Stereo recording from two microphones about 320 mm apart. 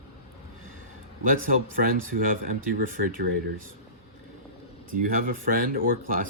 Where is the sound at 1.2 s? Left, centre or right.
Right.